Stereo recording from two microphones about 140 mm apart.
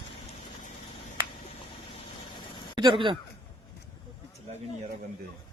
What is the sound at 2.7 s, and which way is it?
Speech, 35° right (ahead or behind).